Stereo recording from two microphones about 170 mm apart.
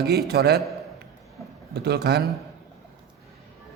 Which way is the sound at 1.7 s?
75° right (ahead or behind).